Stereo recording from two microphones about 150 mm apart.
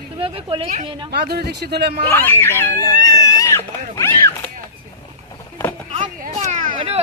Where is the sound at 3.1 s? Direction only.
25° left (ahead or behind).